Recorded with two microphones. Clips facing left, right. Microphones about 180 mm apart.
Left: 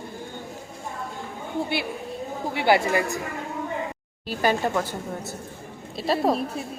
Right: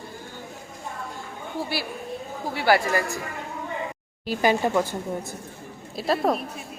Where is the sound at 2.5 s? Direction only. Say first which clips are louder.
Even; 20° left (ahead or behind).